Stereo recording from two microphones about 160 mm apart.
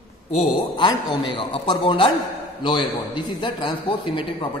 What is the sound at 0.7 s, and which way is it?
A man's voice, 25° left (ahead or behind).